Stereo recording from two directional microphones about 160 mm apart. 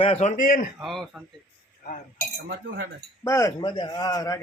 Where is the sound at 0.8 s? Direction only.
Centre (ahead or behind).